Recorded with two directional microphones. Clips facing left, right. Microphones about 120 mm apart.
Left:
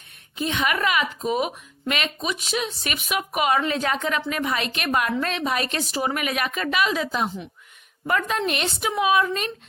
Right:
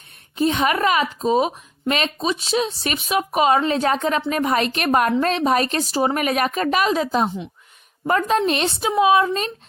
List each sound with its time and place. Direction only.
0.3 s speech: 40° right (ahead or behind)